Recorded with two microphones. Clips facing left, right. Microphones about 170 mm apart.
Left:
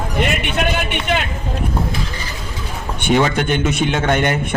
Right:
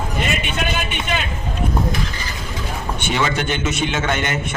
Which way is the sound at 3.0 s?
50° left (ahead or behind).